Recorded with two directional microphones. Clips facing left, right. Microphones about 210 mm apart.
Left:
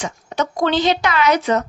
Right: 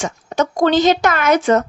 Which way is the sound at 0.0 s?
45° right (ahead or behind).